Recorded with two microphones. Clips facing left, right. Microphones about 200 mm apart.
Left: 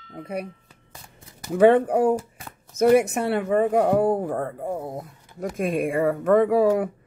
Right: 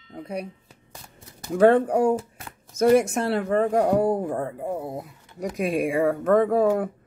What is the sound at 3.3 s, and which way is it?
Speech, 5° left (ahead or behind).